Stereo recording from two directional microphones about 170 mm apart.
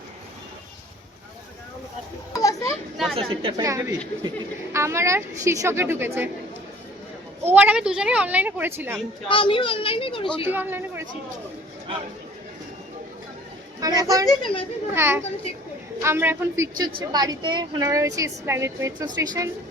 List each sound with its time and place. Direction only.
2.3 s a sound: 20° left (ahead or behind)
3.2 s a woman's voice: 35° right (ahead or behind)
3.6 s a woman's voice: 20° right (ahead or behind)
7.4 s a woman's voice: 10° right (ahead or behind)
9.3 s a child's voice: 30° left (ahead or behind)
10.4 s a woman's voice: 10° right (ahead or behind)
13.8 s a woman's voice: 20° right (ahead or behind)
14.3 s speech: 30° left (ahead or behind)
14.9 s a woman's voice: 15° right (ahead or behind)